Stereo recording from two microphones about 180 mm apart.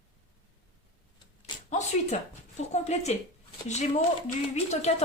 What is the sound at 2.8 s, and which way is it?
Speech, 35° left (ahead or behind).